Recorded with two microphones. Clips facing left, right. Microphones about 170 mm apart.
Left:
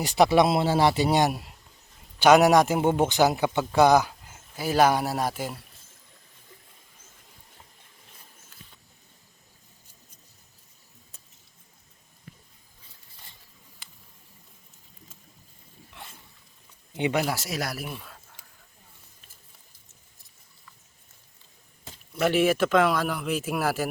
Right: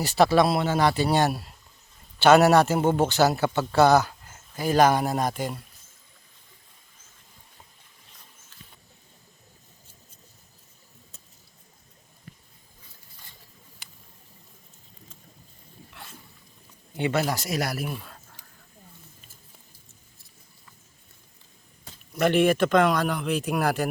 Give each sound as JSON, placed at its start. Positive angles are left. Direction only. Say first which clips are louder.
{"t": 0.0, "sound": "a man's voice", "louder": "even", "side_deg": 15}
{"t": 16.9, "sound": "a man's voice", "louder": "even", "side_deg": 15}
{"t": 22.2, "sound": "a man's voice", "louder": "right 2 dB", "side_deg": 5}